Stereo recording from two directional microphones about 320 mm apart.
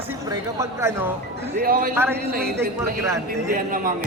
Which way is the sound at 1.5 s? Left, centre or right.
Right.